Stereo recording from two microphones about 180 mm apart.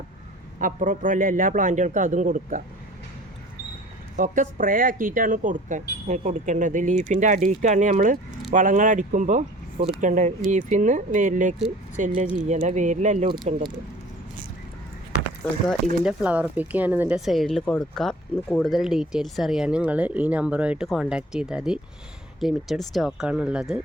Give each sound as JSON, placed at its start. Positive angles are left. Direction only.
{"t": 0.6, "sound": "speech", "side_deg": -45}
{"t": 4.2, "sound": "speech", "side_deg": -45}
{"t": 13.2, "sound": "speech", "side_deg": -25}
{"t": 16.0, "sound": "speech", "side_deg": -5}